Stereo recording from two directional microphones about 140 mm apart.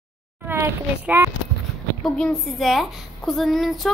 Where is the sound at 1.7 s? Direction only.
5° left (ahead or behind).